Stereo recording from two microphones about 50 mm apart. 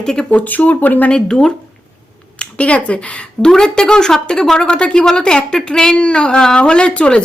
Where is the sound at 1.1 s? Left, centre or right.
Centre.